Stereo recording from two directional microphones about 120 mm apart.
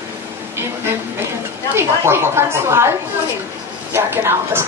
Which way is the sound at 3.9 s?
20° right (ahead or behind).